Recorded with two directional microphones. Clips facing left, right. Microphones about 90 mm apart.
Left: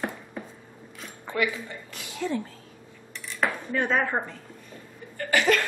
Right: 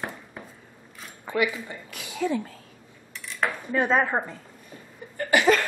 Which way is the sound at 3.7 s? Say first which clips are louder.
Right 5 dB; 15° right (ahead or behind).